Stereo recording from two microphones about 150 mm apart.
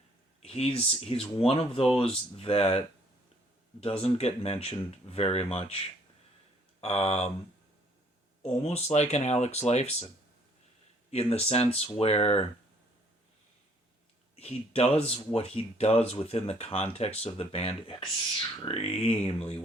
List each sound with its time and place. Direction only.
0.4 s speech: 40° left (ahead or behind)
6.8 s speech: 40° left (ahead or behind)
8.6 s speech: 45° left (ahead or behind)
11.1 s speech: 40° left (ahead or behind)
14.3 s speech: 40° left (ahead or behind)